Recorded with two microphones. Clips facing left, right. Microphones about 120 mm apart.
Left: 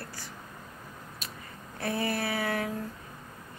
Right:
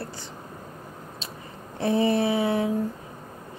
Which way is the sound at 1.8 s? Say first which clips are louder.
Right 9 dB; 25° right (ahead or behind).